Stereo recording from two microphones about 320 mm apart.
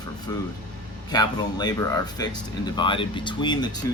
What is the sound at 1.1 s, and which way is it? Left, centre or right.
Speech, centre.